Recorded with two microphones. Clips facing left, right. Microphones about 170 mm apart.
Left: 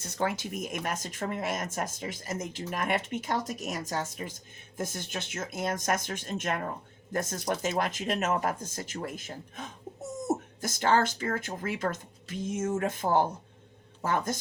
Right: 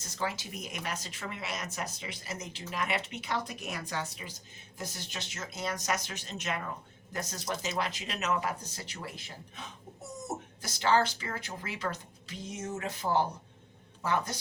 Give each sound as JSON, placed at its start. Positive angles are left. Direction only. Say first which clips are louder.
{"t": 0.0, "sound": "speech", "louder": "left 5 dB", "side_deg": 55}